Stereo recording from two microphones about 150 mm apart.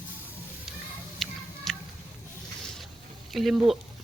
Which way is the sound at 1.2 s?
Centre (ahead or behind).